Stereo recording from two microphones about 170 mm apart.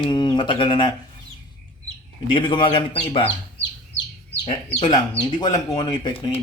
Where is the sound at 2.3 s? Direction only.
25° left (ahead or behind).